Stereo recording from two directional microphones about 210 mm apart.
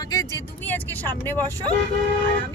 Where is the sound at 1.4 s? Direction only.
15° right (ahead or behind).